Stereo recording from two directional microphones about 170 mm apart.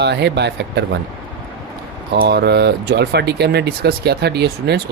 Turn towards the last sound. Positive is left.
turn(degrees=-80)